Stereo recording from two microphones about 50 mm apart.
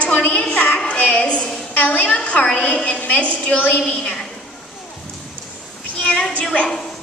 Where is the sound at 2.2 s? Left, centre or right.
Left.